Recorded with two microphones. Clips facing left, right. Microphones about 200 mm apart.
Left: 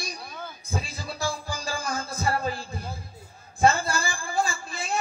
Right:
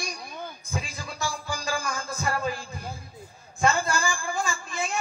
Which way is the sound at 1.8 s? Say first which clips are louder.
Left 2 dB; 35° left (ahead or behind).